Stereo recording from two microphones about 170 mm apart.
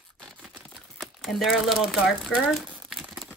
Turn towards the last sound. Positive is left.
turn(degrees=-5)  # may be behind; listen again after turning